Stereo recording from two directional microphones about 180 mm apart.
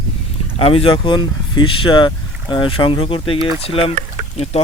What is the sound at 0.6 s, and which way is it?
Speech, 30° left (ahead or behind).